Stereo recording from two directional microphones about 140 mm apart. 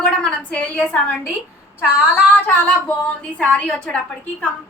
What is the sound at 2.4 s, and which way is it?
A woman's voice, 10° left (ahead or behind).